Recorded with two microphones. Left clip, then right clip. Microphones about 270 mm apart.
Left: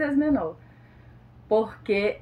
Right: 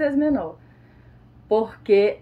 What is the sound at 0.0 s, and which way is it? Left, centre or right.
Speech, centre.